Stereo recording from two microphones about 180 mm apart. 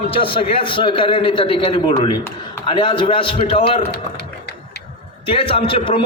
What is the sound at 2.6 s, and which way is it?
Speech, 25° left (ahead or behind).